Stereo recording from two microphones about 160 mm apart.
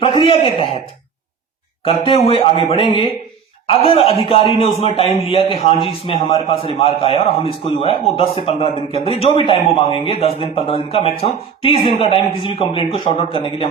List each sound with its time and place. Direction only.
0.2 s a man's voice: 35° left (ahead or behind)
1.8 s a man's voice: 35° left (ahead or behind)